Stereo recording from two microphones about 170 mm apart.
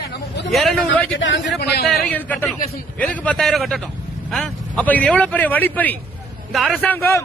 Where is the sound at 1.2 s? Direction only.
90° left.